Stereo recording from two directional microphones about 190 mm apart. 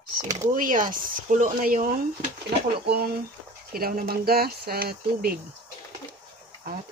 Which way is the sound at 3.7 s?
50° right (ahead or behind).